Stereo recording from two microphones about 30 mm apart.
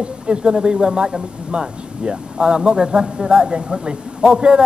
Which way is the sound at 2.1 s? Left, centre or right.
Right.